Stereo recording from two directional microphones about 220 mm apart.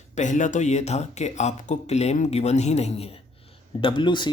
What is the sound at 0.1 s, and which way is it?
Speech, 35° left (ahead or behind).